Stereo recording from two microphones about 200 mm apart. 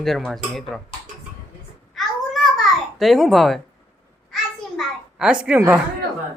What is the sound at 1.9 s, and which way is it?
Babbling, centre (ahead or behind).